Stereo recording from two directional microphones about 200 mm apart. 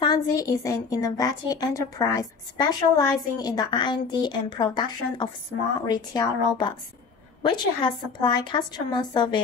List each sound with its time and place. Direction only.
0.0 s a woman's voice: 20° left (ahead or behind)